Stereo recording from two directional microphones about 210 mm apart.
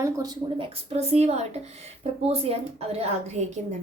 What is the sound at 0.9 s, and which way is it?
A woman's voice, 30° right (ahead or behind).